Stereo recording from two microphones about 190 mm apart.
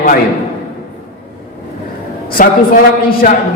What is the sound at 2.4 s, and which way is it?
Speech, 45° left (ahead or behind).